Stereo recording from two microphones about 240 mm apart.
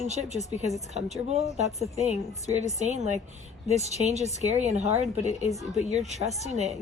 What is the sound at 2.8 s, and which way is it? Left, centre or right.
Speech, right.